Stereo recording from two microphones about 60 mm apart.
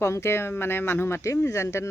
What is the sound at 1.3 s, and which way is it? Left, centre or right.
Speech, left.